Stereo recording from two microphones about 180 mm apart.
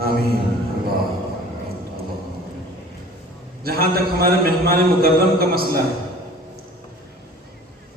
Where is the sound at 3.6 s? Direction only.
55° right (ahead or behind).